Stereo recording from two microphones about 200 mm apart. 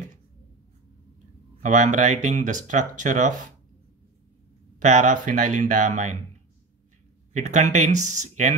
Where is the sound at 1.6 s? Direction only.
40° right (ahead or behind).